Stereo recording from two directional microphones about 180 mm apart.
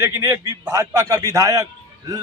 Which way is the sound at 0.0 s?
15° right (ahead or behind).